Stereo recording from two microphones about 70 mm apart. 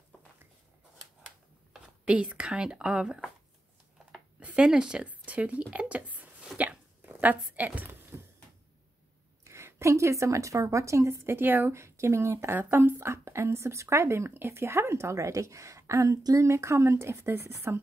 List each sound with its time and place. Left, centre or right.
1.7 s speech: centre
4.4 s speech: centre
7.1 s a sound: right
7.5 s speech: right
9.4 s speech: right